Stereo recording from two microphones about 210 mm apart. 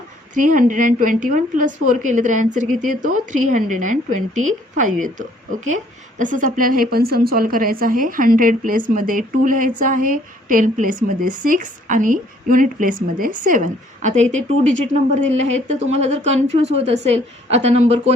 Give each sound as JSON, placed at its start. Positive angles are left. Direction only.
{"t": 0.3, "sound": "a woman's voice", "side_deg": -40}